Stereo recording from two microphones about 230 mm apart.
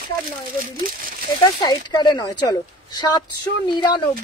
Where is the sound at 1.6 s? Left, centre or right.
Centre.